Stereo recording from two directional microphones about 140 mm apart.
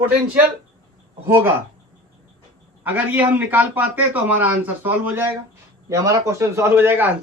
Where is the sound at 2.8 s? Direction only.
10° right (ahead or behind).